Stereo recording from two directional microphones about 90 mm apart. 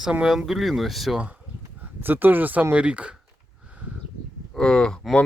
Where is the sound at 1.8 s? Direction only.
20° right (ahead or behind).